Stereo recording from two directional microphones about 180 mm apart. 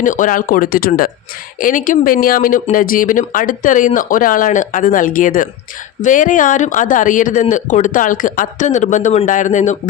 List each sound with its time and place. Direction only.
0.0 s speech: 45° left (ahead or behind)